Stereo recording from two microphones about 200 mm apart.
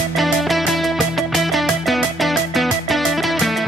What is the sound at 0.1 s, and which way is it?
Music, centre (ahead or behind).